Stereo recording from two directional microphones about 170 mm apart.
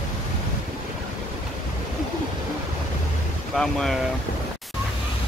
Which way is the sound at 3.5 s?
Centre (ahead or behind).